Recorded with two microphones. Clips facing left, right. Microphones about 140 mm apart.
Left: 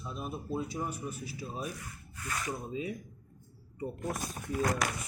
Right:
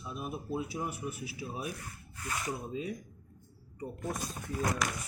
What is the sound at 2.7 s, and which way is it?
Speech, 5° left (ahead or behind).